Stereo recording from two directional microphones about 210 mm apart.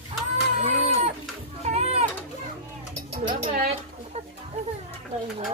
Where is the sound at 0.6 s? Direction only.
30° right (ahead or behind).